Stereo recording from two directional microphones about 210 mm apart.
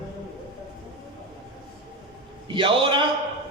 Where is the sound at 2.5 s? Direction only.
25° right (ahead or behind).